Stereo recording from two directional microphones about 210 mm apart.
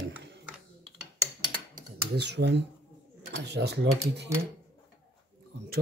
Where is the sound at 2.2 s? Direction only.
55° right (ahead or behind).